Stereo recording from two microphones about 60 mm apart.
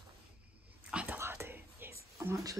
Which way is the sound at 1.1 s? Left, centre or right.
Right.